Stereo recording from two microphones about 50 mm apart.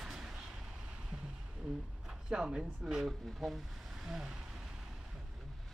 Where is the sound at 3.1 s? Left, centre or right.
Centre.